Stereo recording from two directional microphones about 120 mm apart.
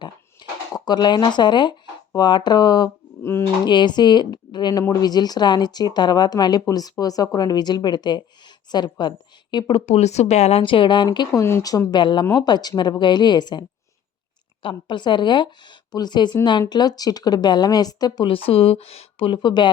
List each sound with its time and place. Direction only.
0.7 s speech: 35° left (ahead or behind)
3.2 s speech: 20° left (ahead or behind)
3.6 s a woman's voice: 40° left (ahead or behind)
9.8 s speech: 65° left (ahead or behind)
10.6 s speech: 45° left (ahead or behind)